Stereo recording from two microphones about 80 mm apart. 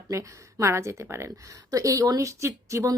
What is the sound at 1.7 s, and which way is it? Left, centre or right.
Speech, right.